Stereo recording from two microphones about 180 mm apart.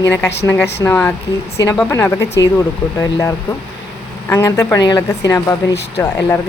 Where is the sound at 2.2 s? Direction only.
65° left (ahead or behind).